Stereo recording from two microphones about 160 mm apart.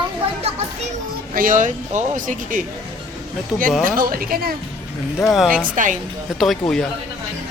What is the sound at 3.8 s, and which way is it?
Speech, 65° right (ahead or behind).